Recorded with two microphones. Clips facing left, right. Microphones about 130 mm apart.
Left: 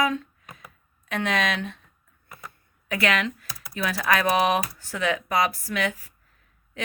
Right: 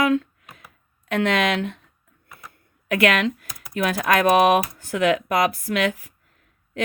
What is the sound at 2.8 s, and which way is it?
Speech, 55° right (ahead or behind).